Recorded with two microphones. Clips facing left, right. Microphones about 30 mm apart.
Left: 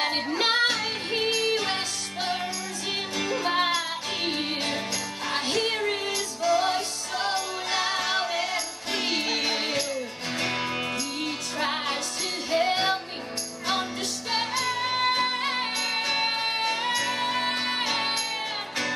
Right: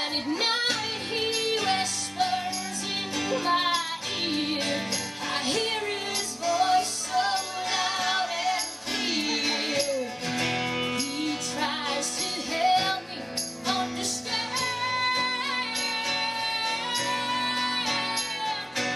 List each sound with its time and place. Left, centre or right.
0.1 s music: left
1.3 s music: centre
14.9 s music: centre